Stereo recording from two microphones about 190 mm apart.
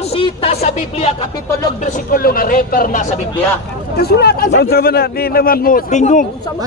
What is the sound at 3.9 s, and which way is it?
A man's voice, 60° left (ahead or behind).